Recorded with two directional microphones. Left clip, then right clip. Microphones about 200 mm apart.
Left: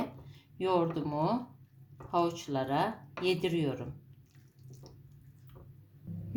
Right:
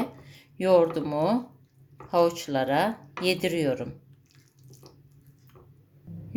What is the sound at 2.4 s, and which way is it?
Speech, 25° right (ahead or behind).